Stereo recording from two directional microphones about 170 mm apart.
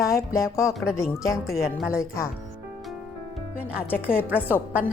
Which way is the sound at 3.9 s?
10° left (ahead or behind).